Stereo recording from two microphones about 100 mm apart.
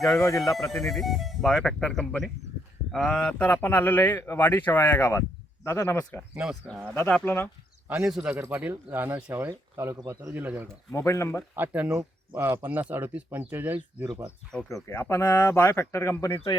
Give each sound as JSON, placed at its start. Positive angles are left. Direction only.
{"t": 0.2, "sound": "speech", "side_deg": 30}
{"t": 0.7, "sound": "speech", "side_deg": 5}
{"t": 6.3, "sound": "speech", "side_deg": -10}
{"t": 6.9, "sound": "speech", "side_deg": 20}
{"t": 8.0, "sound": "a man's voice", "side_deg": -10}
{"t": 10.3, "sound": "speech", "side_deg": -15}
{"t": 10.9, "sound": "speech", "side_deg": 30}
{"t": 11.5, "sound": "speech", "side_deg": -15}
{"t": 14.5, "sound": "speech", "side_deg": 10}
{"t": 14.8, "sound": "speech", "side_deg": 25}